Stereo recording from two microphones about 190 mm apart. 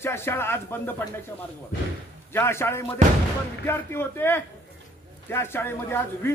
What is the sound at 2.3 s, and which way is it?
Speech, 10° left (ahead or behind).